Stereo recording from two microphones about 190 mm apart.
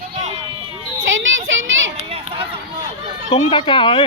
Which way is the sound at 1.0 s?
90° right.